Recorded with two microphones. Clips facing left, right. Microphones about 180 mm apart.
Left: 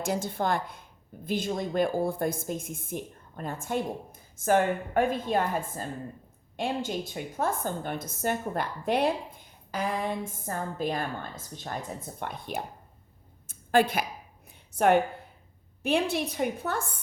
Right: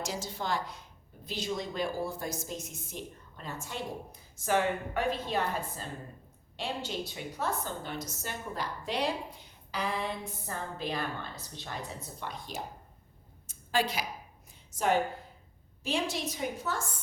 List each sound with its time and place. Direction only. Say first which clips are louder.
0.0 s a woman's voice: left 7 dB; 55° left (ahead or behind)
13.5 s a sound: left 7 dB; 55° left (ahead or behind)
15.8 s a woman's voice: left 6 dB; 60° left (ahead or behind)